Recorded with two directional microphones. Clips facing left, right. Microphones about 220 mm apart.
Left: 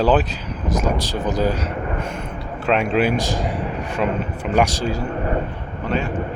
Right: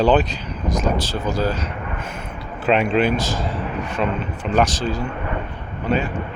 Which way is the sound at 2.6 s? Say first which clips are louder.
Right 1 dB; centre (ahead or behind).